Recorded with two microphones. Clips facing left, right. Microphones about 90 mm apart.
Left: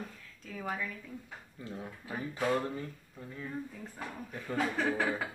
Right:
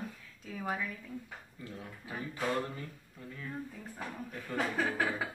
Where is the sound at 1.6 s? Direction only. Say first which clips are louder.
Left 4 dB; 25° left (ahead or behind).